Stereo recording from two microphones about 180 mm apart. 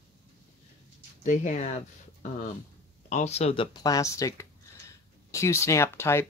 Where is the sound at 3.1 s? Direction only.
40° left (ahead or behind).